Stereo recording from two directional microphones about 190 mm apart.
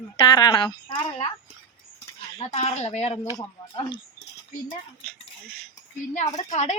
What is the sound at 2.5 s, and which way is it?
Speech, 35° left (ahead or behind).